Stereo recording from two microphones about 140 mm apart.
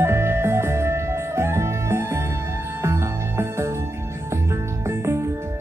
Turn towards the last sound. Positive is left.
turn(degrees=-20)  # may be behind; listen again after turning